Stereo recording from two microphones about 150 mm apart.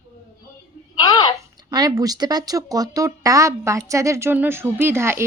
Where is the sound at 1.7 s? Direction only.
25° right (ahead or behind).